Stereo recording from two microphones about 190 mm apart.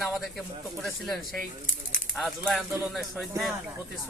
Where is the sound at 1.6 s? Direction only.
40° left (ahead or behind).